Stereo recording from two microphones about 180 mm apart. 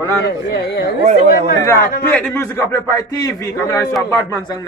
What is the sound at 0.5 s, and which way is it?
Speech, 70° left (ahead or behind).